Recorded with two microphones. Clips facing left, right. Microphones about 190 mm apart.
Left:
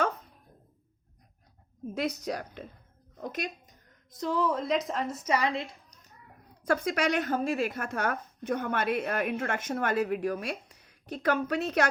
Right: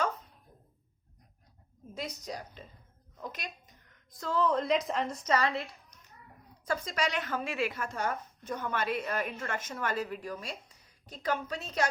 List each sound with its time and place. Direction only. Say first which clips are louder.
2.0 s a woman's voice: left 7 dB; 70° left (ahead or behind)
3.2 s speech: left 7 dB; 50° left (ahead or behind)
4.1 s a woman's voice: left 1 dB; 15° left (ahead or behind)
6.7 s a woman's voice: left 6 dB; 60° left (ahead or behind)